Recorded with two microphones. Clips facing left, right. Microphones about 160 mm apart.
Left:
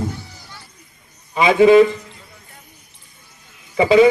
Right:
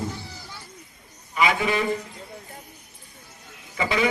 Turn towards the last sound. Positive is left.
turn(degrees=25)  # may be behind; listen again after turning